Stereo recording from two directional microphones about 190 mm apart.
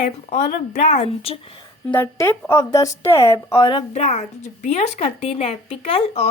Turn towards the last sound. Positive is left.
turn(degrees=30)  # may be behind; listen again after turning